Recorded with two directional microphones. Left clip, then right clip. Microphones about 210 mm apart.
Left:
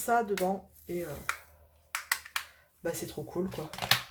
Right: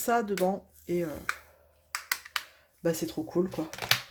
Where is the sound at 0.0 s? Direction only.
45° right (ahead or behind).